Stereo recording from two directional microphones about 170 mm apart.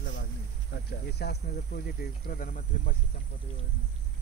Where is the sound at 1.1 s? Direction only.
75° left (ahead or behind); by 3.0 s 50° left (ahead or behind).